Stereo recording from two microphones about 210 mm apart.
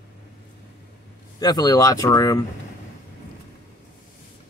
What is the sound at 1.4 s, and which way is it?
Speech, 20° left (ahead or behind).